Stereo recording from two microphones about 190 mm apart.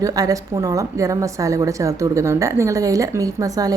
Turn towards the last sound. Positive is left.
turn(degrees=-20)  # may be behind; listen again after turning